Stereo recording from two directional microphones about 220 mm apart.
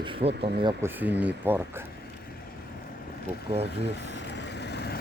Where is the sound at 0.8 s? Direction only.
10° right (ahead or behind).